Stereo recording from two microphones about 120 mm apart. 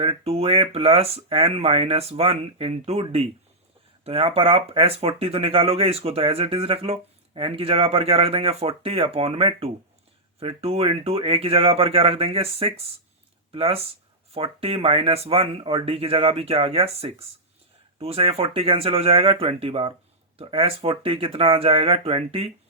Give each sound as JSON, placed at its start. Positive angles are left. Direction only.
{"t": 0.0, "sound": "speech", "side_deg": -55}